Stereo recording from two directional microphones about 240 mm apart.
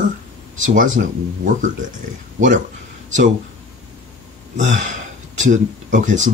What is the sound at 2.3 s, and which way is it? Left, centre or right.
Speech, right.